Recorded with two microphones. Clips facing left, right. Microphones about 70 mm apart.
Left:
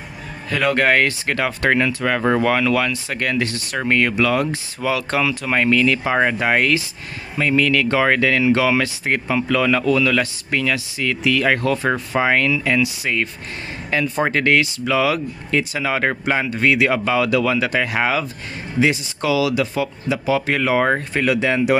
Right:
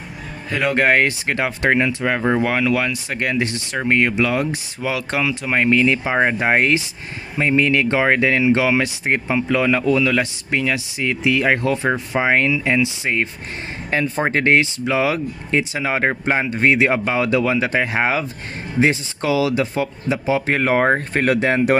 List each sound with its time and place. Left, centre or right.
0.5 s speech: right